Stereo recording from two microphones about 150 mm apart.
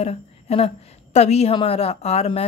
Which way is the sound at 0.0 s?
40° left (ahead or behind).